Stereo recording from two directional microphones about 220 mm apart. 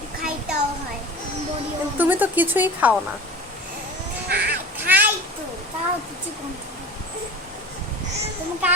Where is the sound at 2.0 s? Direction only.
10° right (ahead or behind).